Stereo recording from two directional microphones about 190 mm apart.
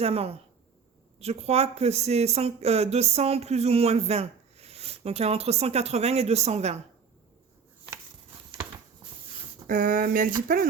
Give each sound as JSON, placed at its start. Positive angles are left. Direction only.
{"t": 0.0, "sound": "speech", "side_deg": -30}
{"t": 9.6, "sound": "speech", "side_deg": -45}